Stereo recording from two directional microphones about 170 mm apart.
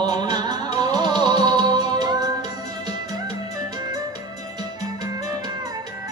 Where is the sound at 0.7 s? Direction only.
25° right (ahead or behind).